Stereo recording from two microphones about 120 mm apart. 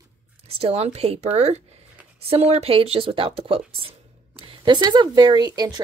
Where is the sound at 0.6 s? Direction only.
55° right (ahead or behind).